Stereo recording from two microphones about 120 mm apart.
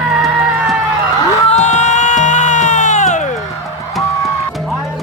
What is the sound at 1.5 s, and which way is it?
Music, 75° left (ahead or behind).